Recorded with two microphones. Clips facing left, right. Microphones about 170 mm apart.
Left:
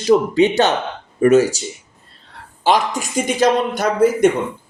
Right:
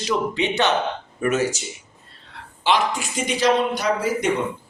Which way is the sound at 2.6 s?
45° left (ahead or behind).